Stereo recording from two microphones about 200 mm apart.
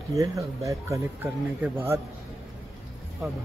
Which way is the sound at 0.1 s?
15° right (ahead or behind).